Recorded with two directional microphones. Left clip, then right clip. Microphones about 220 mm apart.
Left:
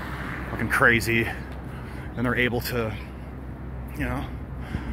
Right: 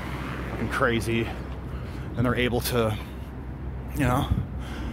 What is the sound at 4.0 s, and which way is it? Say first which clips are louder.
Speech: right 6 dB; 25° right (ahead or behind).